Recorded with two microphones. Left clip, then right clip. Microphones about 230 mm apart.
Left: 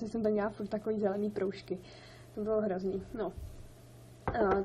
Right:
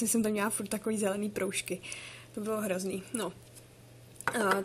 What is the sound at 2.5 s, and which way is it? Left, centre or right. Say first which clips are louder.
Speech: left 1 dB; right.